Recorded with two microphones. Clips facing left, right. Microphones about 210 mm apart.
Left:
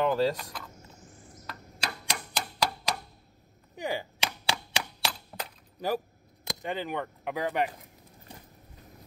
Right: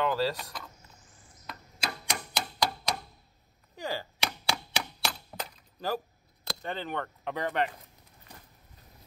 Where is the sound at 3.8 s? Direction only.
15° left (ahead or behind).